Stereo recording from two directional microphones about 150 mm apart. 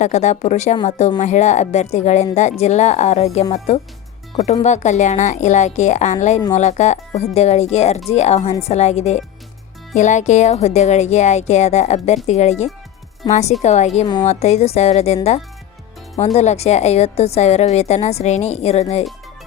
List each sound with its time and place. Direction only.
0.0 s a woman's voice: 50° left (ahead or behind)
4.6 s a woman's voice: 50° left (ahead or behind)
13.2 s speech: 30° left (ahead or behind)
13.6 s a woman's voice: 50° left (ahead or behind)